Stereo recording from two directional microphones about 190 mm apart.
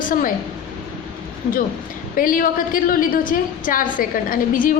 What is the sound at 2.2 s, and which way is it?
A woman's voice, 45° left (ahead or behind).